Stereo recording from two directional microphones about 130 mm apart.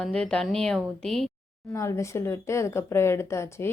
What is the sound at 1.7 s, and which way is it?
Speech, 25° left (ahead or behind).